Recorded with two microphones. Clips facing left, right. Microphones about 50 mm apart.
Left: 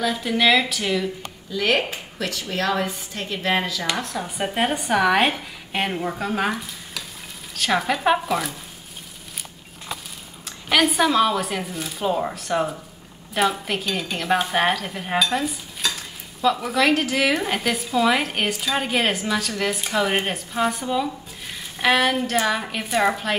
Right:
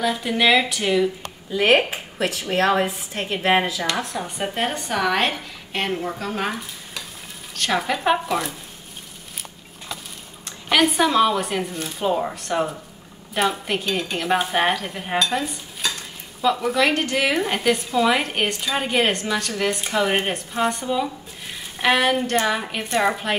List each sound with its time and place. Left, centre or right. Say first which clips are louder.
0.0 s speech: even; centre
1.5 s a woman's voice: right 4 dB; right
3.9 s speech: right 1 dB; centre
10.4 s speech: right 1 dB; centre